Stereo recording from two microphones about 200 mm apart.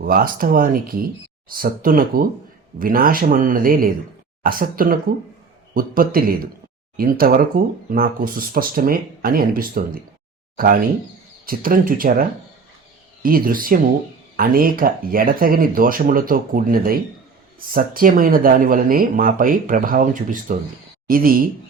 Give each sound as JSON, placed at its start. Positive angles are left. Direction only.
{"t": 0.0, "sound": "speech", "side_deg": -45}
{"t": 13.2, "sound": "speech", "side_deg": -45}